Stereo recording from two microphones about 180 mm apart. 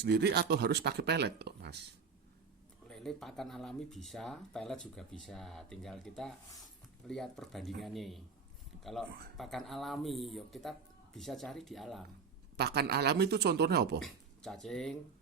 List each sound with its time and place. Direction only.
0.0 s speech: 65° right (ahead or behind)
2.8 s speech: centre (ahead or behind)
12.5 s speech: 65° right (ahead or behind)
14.0 s speech: centre (ahead or behind)